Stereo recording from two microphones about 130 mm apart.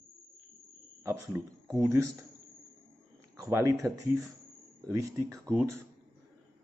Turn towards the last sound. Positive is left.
turn(degrees=-25)  # may be behind; listen again after turning